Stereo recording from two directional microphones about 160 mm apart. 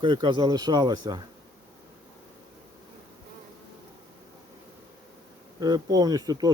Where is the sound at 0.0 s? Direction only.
30° right (ahead or behind).